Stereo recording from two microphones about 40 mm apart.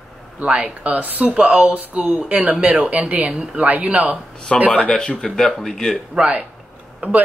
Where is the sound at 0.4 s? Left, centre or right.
Right.